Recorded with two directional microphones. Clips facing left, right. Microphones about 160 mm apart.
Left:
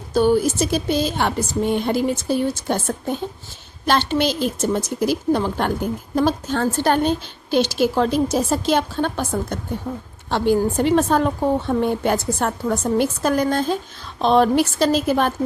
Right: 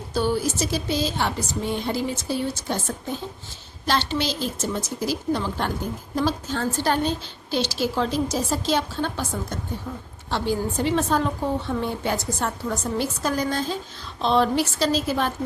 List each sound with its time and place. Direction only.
0.1 s a woman's voice: 50° left (ahead or behind)